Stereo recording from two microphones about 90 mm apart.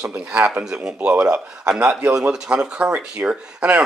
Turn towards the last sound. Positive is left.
turn(degrees=-15)  # may be behind; listen again after turning